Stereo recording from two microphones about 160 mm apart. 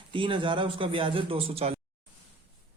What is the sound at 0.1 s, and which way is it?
Speech, 30° right (ahead or behind).